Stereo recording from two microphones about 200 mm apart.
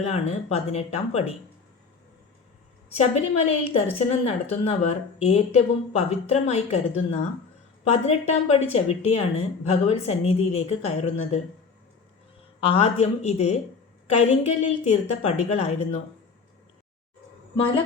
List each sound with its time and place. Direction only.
0.0 s speech: 30° left (ahead or behind)
3.0 s a woman's voice: 30° left (ahead or behind)
8.3 s speech: 30° left (ahead or behind)
12.5 s speech: 30° left (ahead or behind)